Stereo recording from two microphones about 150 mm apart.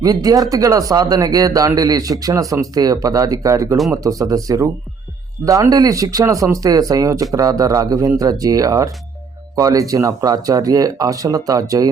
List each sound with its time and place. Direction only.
0.0 s speech: 25° right (ahead or behind)